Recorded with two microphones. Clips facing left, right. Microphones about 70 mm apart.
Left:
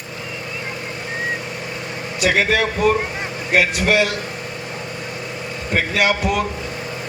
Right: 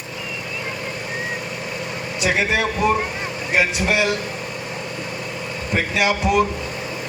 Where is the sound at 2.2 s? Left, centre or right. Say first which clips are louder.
Left 3 dB; left.